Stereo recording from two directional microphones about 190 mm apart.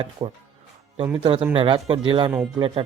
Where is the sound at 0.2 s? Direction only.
25° right (ahead or behind).